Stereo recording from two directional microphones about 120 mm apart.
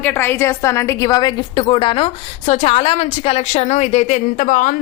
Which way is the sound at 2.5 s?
60° left (ahead or behind).